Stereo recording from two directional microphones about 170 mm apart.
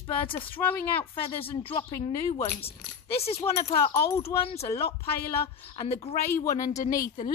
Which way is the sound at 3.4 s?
15° left (ahead or behind).